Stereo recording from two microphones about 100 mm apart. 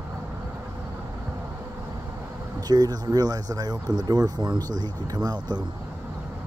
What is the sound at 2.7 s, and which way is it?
Speech, 40° right (ahead or behind).